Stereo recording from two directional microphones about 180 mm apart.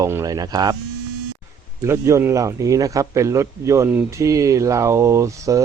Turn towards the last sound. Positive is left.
turn(degrees=-15)  # may be behind; listen again after turning